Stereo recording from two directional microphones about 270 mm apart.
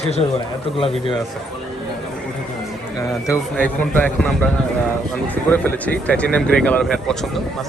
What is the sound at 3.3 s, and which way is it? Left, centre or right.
Speech, centre.